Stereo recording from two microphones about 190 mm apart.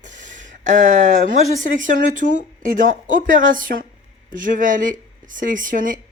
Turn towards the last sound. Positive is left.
turn(degrees=-45)  # may be behind; listen again after turning